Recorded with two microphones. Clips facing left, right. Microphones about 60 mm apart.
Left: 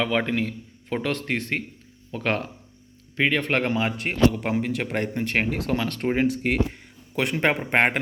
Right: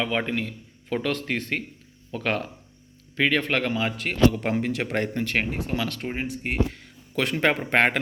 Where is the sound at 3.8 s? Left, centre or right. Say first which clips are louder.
Left 1 dB; left.